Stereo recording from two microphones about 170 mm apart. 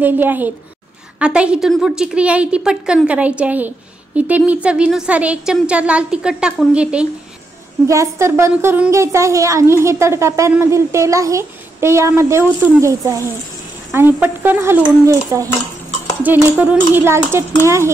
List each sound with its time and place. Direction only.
0.0 s a woman's voice: 10° right (ahead or behind)
7.8 s a woman's voice: 15° right (ahead or behind)